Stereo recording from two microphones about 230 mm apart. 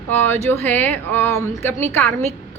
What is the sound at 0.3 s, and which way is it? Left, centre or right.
A man's voice, centre.